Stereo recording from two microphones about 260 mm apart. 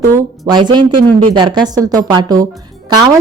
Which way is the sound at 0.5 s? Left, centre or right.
Centre.